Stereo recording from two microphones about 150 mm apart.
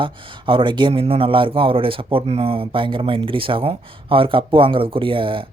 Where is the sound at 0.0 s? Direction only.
35° right (ahead or behind).